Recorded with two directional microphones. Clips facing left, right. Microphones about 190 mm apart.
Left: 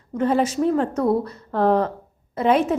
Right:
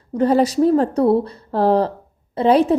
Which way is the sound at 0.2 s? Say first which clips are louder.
Right 5 dB; 35° right (ahead or behind).